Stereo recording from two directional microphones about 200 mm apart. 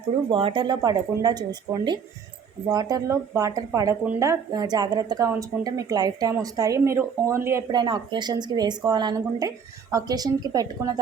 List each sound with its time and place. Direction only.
0.3 s speech: 25° right (ahead or behind)